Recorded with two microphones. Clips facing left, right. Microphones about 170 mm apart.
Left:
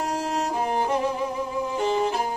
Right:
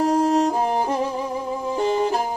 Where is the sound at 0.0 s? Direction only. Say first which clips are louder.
Right 9 dB; 40° right (ahead or behind).